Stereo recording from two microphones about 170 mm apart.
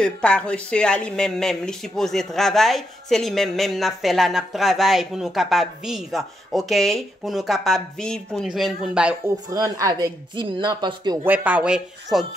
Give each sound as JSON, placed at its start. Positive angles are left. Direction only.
{"t": 0.0, "sound": "speech", "side_deg": 5}
{"t": 9.5, "sound": "speech", "side_deg": -20}
{"t": 11.2, "sound": "speech", "side_deg": -10}